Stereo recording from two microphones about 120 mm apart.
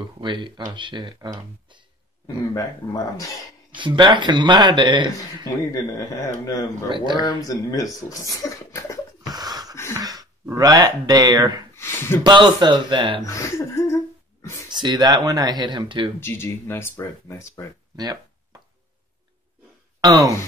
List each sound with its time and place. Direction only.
0.2 s speech: 40° right (ahead or behind)
2.2 s speech: 30° left (ahead or behind)
3.7 s speech: 40° right (ahead or behind)
5.4 s speech: 30° left (ahead or behind)
9.3 s a sound: 35° right (ahead or behind)
9.9 s gasp: 30° right (ahead or behind)
10.4 s speech: 30° right (ahead or behind)
11.7 s speech: 20° left (ahead or behind)
12.2 s speech: 40° right (ahead or behind)
13.2 s speech: 25° left (ahead or behind)
14.7 s speech: 35° right (ahead or behind)
16.2 s speech: 20° left (ahead or behind)
17.9 s a sound: 35° right (ahead or behind)
20.0 s speech: 30° right (ahead or behind)